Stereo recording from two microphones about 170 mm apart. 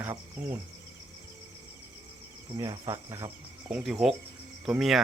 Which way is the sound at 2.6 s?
20° right (ahead or behind).